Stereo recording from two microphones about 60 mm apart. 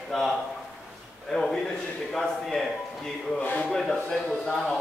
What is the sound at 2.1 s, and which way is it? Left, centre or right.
Speech, centre.